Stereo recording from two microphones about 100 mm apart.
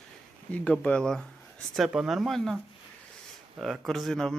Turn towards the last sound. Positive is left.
turn(degrees=0)  # may be behind; listen again after turning